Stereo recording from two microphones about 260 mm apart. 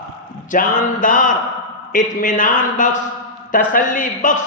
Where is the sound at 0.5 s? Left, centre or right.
Left.